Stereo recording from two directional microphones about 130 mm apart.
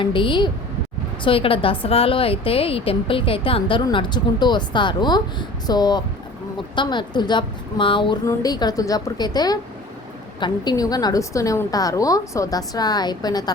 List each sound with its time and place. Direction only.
0.0 s a woman's voice: 40° left (ahead or behind)
8.3 s a woman's voice: 30° left (ahead or behind)